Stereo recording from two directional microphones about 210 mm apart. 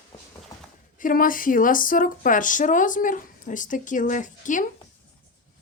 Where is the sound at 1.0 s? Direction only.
40° left (ahead or behind).